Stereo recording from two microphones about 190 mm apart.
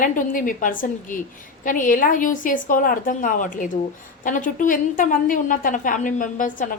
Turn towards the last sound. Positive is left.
turn(degrees=45)  # may be behind; listen again after turning